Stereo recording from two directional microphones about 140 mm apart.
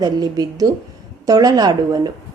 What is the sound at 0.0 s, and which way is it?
A woman's voice, 30° right (ahead or behind).